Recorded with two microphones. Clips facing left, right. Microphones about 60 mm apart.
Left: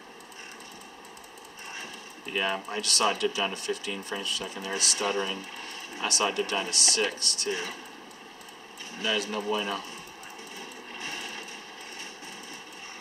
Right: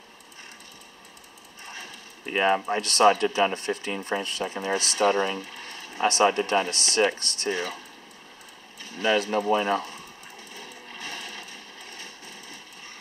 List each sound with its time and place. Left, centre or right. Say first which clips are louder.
2.2 s speech: right 7 dB; right
9.0 s speech: right 6 dB; right
10.6 s a sound: right 1 dB; left